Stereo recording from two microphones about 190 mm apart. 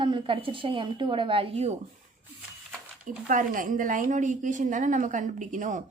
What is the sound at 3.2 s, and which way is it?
Speech, 45° right (ahead or behind).